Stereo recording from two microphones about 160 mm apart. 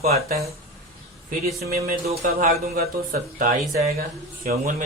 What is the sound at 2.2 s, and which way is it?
A man's voice, 65° right (ahead or behind).